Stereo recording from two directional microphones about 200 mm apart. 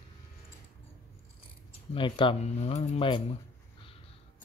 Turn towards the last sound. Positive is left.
turn(degrees=30)  # may be behind; listen again after turning